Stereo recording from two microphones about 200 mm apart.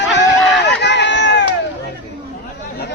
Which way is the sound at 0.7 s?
60° left (ahead or behind).